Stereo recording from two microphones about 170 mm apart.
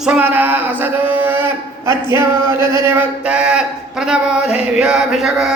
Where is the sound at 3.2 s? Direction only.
5° right (ahead or behind).